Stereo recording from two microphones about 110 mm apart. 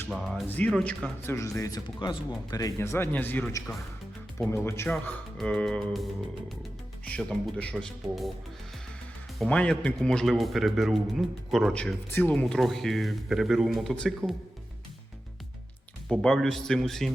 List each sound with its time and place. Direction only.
0.2 s speech: centre (ahead or behind)
0.4 s speech: 15° left (ahead or behind)
0.7 s speech: 5° left (ahead or behind)
1.3 s speech: 30° left (ahead or behind)
5.4 s speech: 5° left (ahead or behind)
7.1 s speech: 10° left (ahead or behind)
9.5 s speech: 10° left (ahead or behind)
11.7 s speech: 10° left (ahead or behind)
16.2 s speech: 5° left (ahead or behind)